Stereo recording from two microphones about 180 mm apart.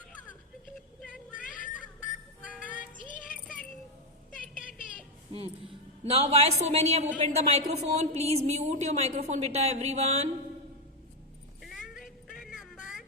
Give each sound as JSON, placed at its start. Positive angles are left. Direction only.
{"t": 1.3, "sound": "a sound", "side_deg": 50}
{"t": 3.0, "sound": "music", "side_deg": 50}
{"t": 5.3, "sound": "a woman's voice", "side_deg": -35}
{"t": 11.6, "sound": "vehicle", "side_deg": 0}